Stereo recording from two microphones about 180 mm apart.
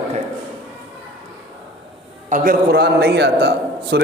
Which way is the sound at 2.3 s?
50° right (ahead or behind).